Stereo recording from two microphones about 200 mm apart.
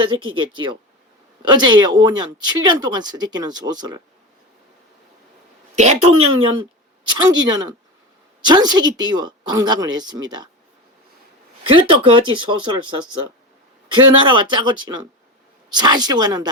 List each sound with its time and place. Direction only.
0.0 s speech: 25° right (ahead or behind)
5.7 s a woman's voice: 35° right (ahead or behind)
6.1 s speech: 90° right
6.3 s speech: 25° right (ahead or behind)
11.6 s speech: 25° right (ahead or behind)